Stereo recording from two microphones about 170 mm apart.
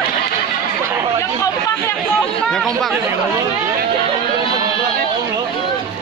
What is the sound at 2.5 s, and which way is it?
Speech, 5° left (ahead or behind).